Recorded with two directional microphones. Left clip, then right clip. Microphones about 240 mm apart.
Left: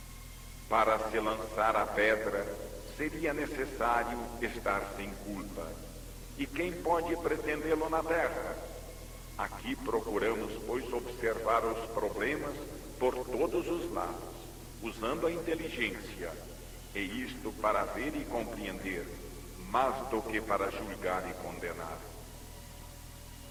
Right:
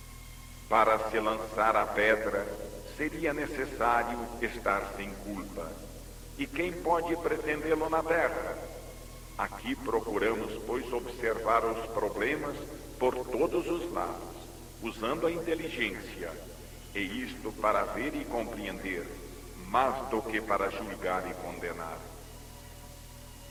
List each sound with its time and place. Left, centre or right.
0.7 s a man's voice: right